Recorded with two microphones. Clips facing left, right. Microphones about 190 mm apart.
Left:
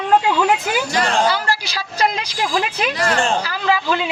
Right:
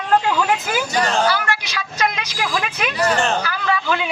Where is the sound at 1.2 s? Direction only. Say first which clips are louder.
Left 1 dB; 30° left (ahead or behind).